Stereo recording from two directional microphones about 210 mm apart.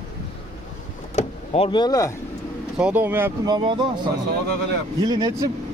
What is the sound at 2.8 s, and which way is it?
Speech, 10° right (ahead or behind).